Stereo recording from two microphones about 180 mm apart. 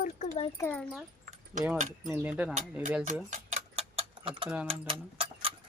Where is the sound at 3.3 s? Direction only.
35° right (ahead or behind).